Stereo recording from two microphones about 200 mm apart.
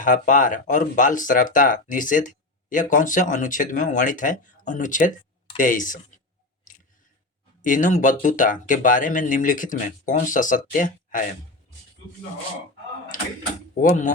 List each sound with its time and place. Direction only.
0.0 s speech: 40° left (ahead or behind)
7.6 s speech: 40° left (ahead or behind)
13.1 s speech: 40° left (ahead or behind)